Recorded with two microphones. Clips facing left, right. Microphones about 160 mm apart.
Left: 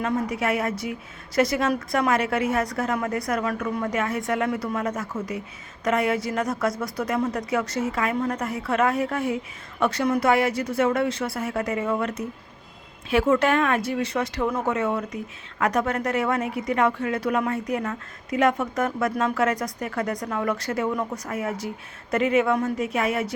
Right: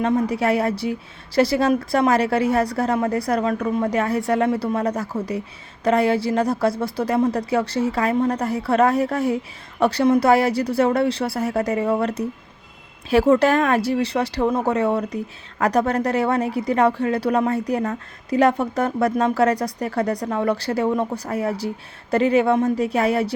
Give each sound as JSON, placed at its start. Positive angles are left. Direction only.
{"t": 0.0, "sound": "speech", "side_deg": -30}